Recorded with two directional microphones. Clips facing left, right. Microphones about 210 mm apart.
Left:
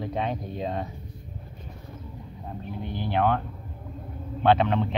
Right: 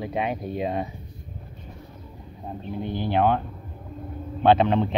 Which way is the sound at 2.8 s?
20° right (ahead or behind).